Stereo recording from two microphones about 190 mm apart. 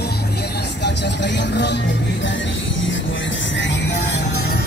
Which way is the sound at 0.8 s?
65° left (ahead or behind).